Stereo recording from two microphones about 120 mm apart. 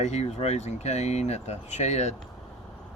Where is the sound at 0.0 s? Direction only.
65° left (ahead or behind).